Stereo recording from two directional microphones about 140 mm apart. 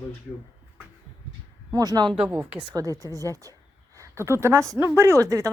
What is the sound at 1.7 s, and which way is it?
Speech, 25° right (ahead or behind).